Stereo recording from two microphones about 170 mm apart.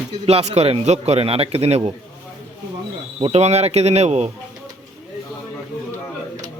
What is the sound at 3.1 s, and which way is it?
Speech, 35° right (ahead or behind).